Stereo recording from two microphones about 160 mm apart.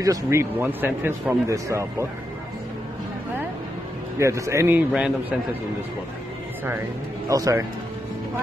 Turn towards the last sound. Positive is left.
turn(degrees=-20)  # may be behind; listen again after turning